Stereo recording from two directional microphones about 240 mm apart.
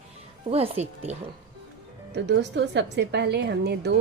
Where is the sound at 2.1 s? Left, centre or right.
Right.